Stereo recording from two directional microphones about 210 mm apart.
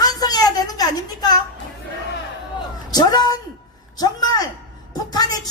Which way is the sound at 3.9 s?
20° left (ahead or behind).